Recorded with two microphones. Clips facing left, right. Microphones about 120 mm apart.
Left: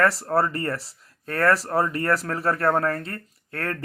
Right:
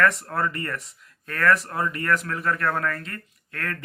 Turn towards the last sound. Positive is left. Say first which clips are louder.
# left 3 dB
turn(degrees=30)  # may be behind; listen again after turning